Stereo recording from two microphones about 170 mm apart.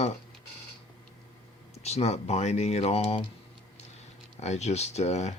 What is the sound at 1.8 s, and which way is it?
Speech, 40° left (ahead or behind).